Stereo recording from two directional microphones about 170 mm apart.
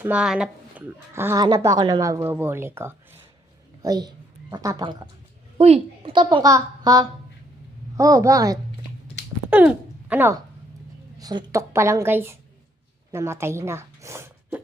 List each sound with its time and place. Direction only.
0.0 s a woman's voice: 5° right (ahead or behind); by 5.0 s 25° right (ahead or behind)
5.5 s a woman's voice: 35° right (ahead or behind); by 8.5 s 20° right (ahead or behind)
9.5 s speech: 10° right (ahead or behind)
11.2 s speech: 25° right (ahead or behind)